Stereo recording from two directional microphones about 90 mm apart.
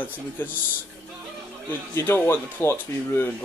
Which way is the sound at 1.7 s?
20° left (ahead or behind).